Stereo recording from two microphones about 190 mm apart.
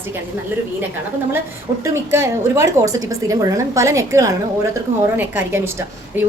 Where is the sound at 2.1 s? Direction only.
15° right (ahead or behind).